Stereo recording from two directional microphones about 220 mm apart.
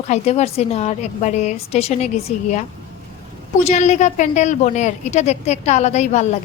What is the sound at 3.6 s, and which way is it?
A woman's voice, 30° left (ahead or behind).